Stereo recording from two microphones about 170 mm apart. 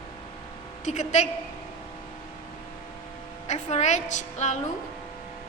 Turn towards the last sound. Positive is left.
turn(degrees=45)  # may be behind; listen again after turning